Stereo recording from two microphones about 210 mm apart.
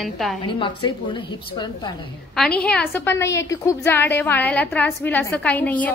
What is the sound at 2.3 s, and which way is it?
A woman's voice, 5° left (ahead or behind).